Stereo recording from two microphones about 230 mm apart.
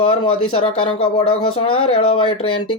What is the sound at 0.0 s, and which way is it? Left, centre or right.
Speech, left.